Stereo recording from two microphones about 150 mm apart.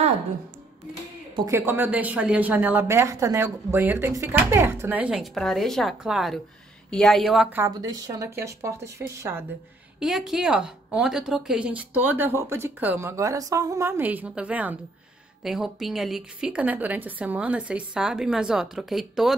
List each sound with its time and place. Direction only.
1.3 s speech: 25° right (ahead or behind)
1.7 s a woman's voice: 10° right (ahead or behind)
7.7 s speech: 25° right (ahead or behind)
9.9 s a woman's voice: 5° right (ahead or behind)